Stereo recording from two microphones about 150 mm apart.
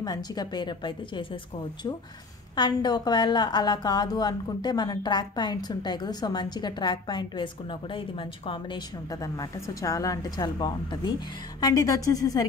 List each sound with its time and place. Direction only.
0.0 s a woman's voice: 25° left (ahead or behind)